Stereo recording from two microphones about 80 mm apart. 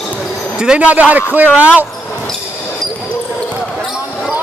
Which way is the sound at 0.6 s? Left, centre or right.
Centre.